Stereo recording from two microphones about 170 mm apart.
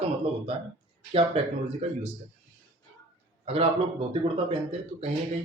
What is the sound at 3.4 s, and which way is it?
A man's voice, 35° right (ahead or behind).